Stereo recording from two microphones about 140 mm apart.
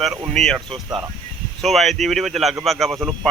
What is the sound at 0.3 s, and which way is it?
Speech, centre (ahead or behind).